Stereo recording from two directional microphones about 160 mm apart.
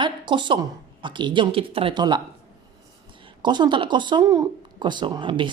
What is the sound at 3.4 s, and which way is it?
Speech, 30° right (ahead or behind).